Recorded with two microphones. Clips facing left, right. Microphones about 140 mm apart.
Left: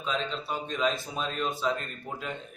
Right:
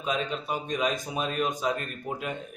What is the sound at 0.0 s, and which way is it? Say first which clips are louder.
Speech: right 2 dB; 10° right (ahead or behind).